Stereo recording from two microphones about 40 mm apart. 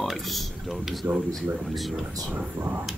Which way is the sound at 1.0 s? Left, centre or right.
Right.